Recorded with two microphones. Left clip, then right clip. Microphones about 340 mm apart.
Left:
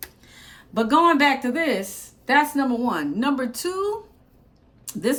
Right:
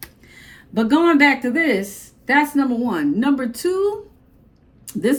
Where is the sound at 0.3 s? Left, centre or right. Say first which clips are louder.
Right 3 dB; left.